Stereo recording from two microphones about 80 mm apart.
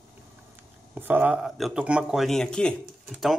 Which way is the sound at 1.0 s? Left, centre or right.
Right.